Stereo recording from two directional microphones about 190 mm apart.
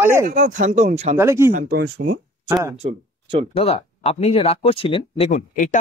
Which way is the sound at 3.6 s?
30° left (ahead or behind).